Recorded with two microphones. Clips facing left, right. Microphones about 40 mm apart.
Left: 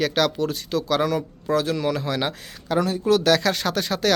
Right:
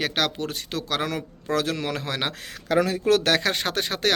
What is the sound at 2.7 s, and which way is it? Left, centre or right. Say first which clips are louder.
Speech: even; right.